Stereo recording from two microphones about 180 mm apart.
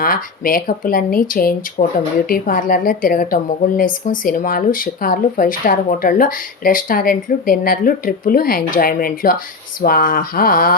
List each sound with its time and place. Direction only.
0.0 s speech: 50° left (ahead or behind)
1.8 s speech: 40° left (ahead or behind)
2.3 s speech: 50° left (ahead or behind)